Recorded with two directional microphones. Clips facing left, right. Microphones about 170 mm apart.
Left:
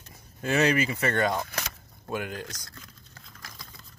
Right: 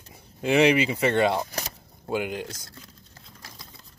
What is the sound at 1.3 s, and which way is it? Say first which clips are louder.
Vehicle: right 3 dB; 30° right (ahead or behind).